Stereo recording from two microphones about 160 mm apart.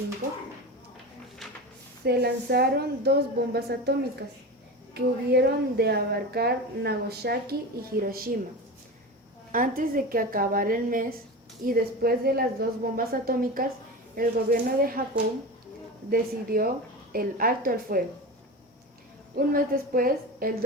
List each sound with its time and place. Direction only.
2.0 s a woman's voice: 85° right
4.9 s a woman's voice: 85° right; by 8.3 s 65° right (ahead or behind)
9.5 s a woman's voice: 60° right (ahead or behind)
16.0 s speech: 65° right (ahead or behind)
19.5 s speech: 65° right (ahead or behind)